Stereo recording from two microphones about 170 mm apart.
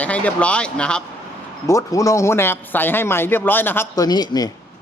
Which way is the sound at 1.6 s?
20° left (ahead or behind).